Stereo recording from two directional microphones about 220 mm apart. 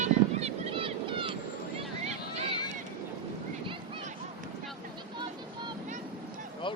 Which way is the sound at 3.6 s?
25° right (ahead or behind).